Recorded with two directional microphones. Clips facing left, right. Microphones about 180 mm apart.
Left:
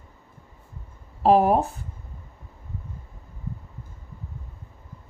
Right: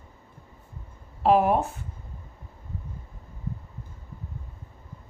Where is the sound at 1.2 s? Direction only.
35° left (ahead or behind).